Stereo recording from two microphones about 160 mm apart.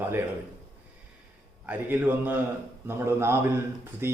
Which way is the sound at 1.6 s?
10° right (ahead or behind).